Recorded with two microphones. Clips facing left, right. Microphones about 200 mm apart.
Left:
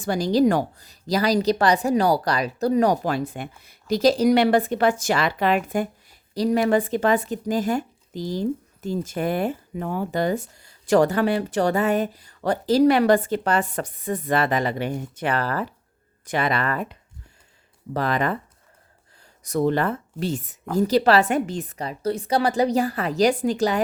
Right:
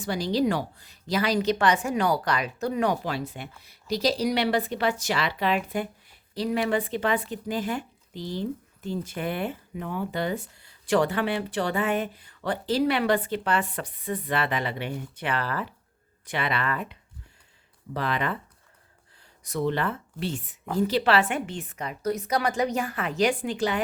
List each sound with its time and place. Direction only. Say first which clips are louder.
0.0 s a woman's voice: left 6 dB; 45° left (ahead or behind)
19.4 s a woman's voice: left 5 dB; 45° left (ahead or behind)